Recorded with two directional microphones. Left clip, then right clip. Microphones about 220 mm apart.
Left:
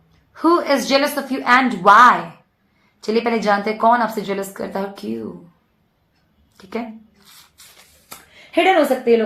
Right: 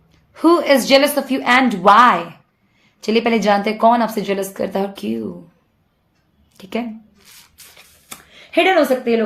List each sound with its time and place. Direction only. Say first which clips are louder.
0.3 s speech: right 3 dB; 50° right (ahead or behind)
6.6 s speech: right 3 dB; 50° right (ahead or behind)
8.3 s a woman's voice: right 1 dB; 40° right (ahead or behind)